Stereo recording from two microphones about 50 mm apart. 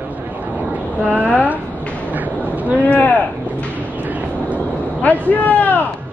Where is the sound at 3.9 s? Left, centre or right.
Right.